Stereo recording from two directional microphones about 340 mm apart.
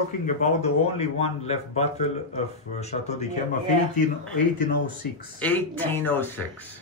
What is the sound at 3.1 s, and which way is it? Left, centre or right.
Speech, centre.